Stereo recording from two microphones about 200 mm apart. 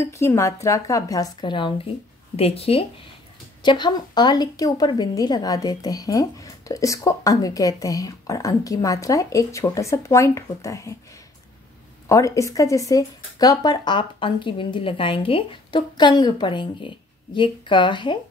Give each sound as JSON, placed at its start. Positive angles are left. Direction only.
{"t": 0.0, "sound": "a woman's voice", "side_deg": 15}
{"t": 12.1, "sound": "speech", "side_deg": 15}